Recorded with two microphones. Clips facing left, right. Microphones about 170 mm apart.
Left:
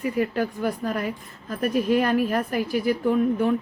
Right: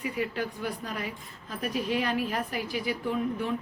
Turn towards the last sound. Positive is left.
turn(degrees=50)  # may be behind; listen again after turning